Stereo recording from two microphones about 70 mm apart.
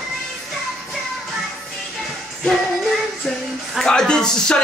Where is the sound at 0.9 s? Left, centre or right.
Centre.